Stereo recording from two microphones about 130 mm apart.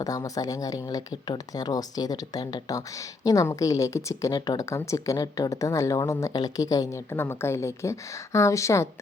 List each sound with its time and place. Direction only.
0.0 s a woman's voice: 25° left (ahead or behind)